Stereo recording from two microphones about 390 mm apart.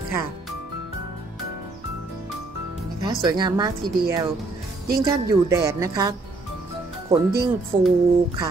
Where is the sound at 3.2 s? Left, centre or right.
Centre.